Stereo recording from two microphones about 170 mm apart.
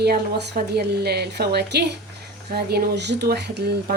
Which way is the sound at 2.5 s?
70° right (ahead or behind).